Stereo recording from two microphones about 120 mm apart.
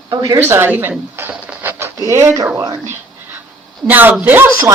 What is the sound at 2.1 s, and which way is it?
Speech, 25° right (ahead or behind).